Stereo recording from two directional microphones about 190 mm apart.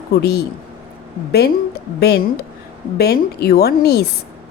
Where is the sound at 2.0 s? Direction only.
55° left (ahead or behind).